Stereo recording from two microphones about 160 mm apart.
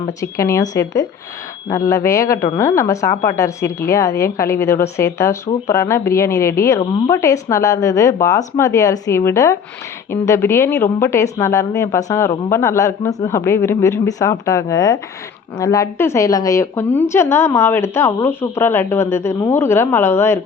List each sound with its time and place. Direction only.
0.2 s a woman's voice: 20° left (ahead or behind)